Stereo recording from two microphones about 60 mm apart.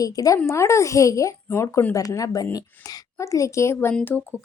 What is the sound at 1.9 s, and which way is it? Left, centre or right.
Speech, left.